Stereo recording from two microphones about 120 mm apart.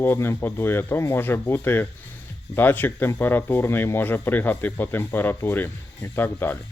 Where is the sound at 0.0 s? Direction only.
20° left (ahead or behind).